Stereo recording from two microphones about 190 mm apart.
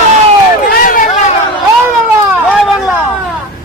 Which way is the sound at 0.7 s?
45° left (ahead or behind).